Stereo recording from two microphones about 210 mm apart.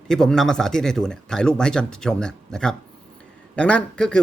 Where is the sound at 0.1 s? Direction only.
5° left (ahead or behind).